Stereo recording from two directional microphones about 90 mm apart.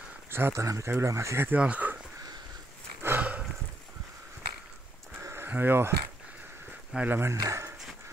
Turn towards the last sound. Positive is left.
turn(degrees=-35)  # may be behind; listen again after turning